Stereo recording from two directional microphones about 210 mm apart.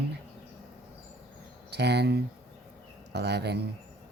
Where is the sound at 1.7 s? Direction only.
50° right (ahead or behind).